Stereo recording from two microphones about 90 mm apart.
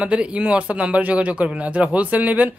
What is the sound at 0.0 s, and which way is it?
Speech, 10° right (ahead or behind).